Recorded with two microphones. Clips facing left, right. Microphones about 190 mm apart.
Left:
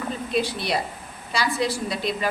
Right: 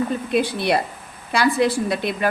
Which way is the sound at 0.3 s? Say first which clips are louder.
Right 5 dB; 55° right (ahead or behind).